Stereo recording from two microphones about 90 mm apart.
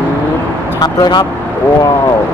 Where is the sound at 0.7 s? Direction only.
50° left (ahead or behind).